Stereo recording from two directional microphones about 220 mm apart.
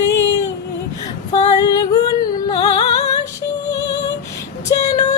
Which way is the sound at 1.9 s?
20° left (ahead or behind).